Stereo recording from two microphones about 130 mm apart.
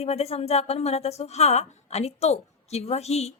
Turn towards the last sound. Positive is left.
turn(degrees=55)  # may be behind; listen again after turning